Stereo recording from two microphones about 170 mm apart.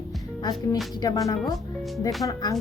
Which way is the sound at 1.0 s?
20° left (ahead or behind).